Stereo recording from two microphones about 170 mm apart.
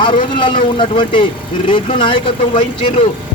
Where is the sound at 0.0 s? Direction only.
30° left (ahead or behind).